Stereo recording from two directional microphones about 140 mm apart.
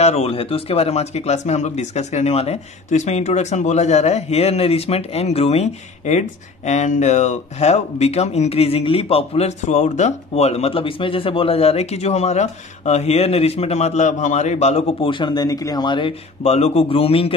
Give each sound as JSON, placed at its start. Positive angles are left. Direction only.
{"t": 0.0, "sound": "speech", "side_deg": 50}
{"t": 15.0, "sound": "speech", "side_deg": 35}